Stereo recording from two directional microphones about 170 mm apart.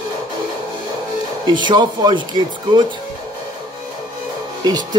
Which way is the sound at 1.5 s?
25° right (ahead or behind).